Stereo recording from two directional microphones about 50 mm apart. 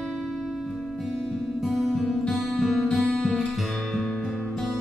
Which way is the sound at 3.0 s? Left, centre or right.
Centre.